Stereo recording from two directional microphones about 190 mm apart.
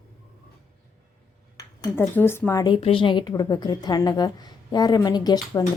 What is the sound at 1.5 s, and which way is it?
Speech, 15° left (ahead or behind).